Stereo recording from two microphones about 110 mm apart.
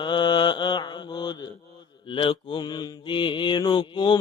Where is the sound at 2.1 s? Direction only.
55° left (ahead or behind).